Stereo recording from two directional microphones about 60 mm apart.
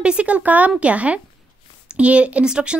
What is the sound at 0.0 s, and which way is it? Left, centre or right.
Speech, centre.